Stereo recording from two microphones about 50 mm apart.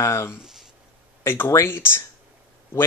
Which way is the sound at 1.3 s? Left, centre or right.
Left.